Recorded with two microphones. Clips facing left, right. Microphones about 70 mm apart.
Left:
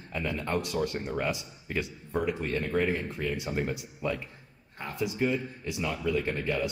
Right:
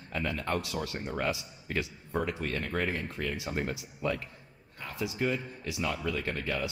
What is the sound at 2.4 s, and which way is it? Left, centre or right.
Speech, centre.